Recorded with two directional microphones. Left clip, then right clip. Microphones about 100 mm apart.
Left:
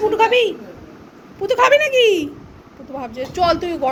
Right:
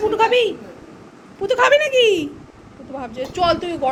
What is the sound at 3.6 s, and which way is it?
Speech, 20° left (ahead or behind).